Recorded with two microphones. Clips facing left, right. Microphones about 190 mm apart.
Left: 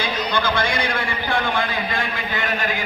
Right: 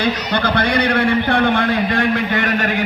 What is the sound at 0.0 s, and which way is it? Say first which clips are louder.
A man's voice: right 4 dB; 70° right (ahead or behind).